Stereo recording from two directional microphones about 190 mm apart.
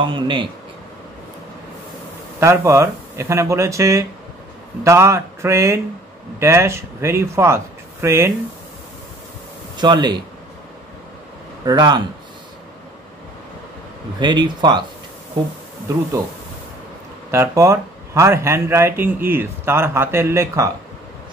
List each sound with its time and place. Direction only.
0.0 s speech: 25° right (ahead or behind)
2.4 s speech: 15° right (ahead or behind)
9.8 s speech: 25° right (ahead or behind)
11.6 s speech: 20° right (ahead or behind)
14.2 s speech: 25° right (ahead or behind)
17.3 s speech: 15° right (ahead or behind)